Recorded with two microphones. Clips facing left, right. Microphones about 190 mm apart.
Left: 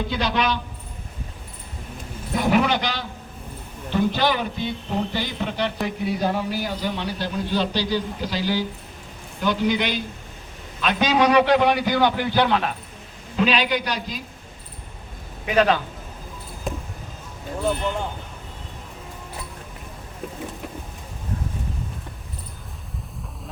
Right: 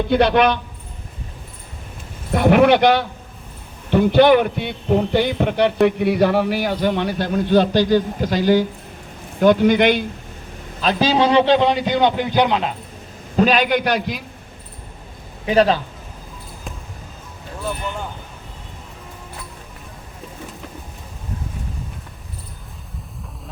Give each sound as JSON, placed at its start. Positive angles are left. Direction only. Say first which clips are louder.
{"t": 0.1, "sound": "a man's voice", "louder": "right 11 dB", "side_deg": -60}
{"t": 2.3, "sound": "a man's voice", "louder": "right 7 dB", "side_deg": -60}
{"t": 10.8, "sound": "a man's voice", "louder": "right 3 dB", "side_deg": -30}
{"t": 13.3, "sound": "a man's voice", "louder": "right 5 dB", "side_deg": -45}
{"t": 15.4, "sound": "a man's voice", "louder": "right 4 dB", "side_deg": -30}